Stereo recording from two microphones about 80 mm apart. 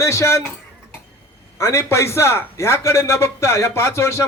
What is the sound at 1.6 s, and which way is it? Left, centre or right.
A man's voice, left.